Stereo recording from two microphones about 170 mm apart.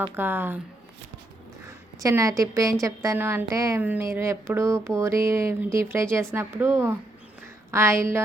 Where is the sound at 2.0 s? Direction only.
20° right (ahead or behind).